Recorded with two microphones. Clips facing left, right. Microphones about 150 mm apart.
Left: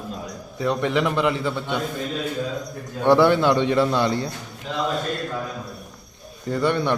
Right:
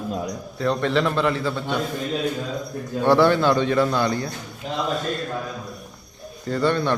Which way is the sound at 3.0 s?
20° left (ahead or behind).